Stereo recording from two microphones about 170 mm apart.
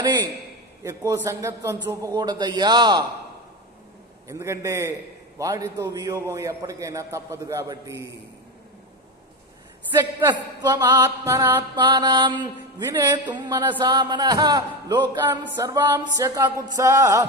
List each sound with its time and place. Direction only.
0.0 s a man's voice: 25° right (ahead or behind)
4.3 s music: 15° right (ahead or behind)
5.4 s a man's voice: 20° right (ahead or behind)
9.9 s music: 10° right (ahead or behind)
10.6 s music: 25° right (ahead or behind)
11.7 s a man's voice: 25° right (ahead or behind)